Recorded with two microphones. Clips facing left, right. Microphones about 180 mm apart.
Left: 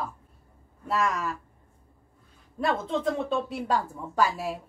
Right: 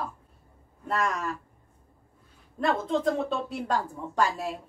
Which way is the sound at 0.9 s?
5° left (ahead or behind).